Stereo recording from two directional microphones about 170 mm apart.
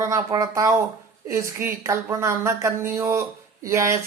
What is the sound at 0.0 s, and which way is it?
Speech, 20° right (ahead or behind).